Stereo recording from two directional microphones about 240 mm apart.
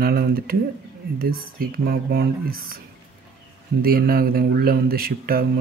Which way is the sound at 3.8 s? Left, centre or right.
Right.